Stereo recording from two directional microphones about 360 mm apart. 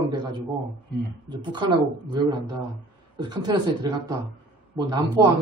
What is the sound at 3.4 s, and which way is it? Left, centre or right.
A man's voice, centre.